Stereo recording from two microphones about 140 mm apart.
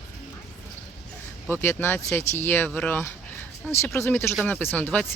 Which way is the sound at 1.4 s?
15° left (ahead or behind).